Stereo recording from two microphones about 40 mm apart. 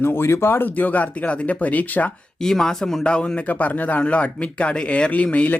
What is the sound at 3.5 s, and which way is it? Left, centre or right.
Speech, left.